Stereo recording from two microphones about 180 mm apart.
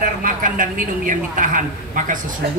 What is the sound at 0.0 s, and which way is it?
A man's voice, 50° right (ahead or behind).